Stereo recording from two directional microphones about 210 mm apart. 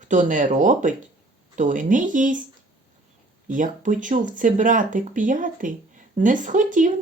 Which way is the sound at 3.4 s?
40° right (ahead or behind).